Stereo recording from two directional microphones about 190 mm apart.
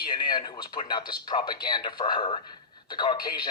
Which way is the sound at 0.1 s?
25° left (ahead or behind).